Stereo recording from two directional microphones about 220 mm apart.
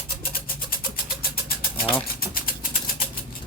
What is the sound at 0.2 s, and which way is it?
Vehicle, 40° left (ahead or behind).